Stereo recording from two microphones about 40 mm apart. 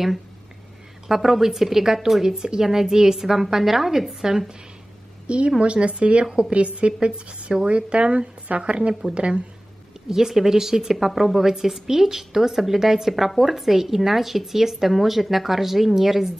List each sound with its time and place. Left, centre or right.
1.0 s a woman's voice: centre
5.2 s a woman's voice: right
10.0 s a woman's voice: centre